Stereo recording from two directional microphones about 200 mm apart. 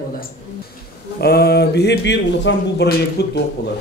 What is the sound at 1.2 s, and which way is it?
Speech, 50° left (ahead or behind).